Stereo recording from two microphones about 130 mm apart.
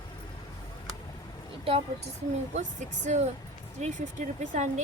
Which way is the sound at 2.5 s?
65° right (ahead or behind).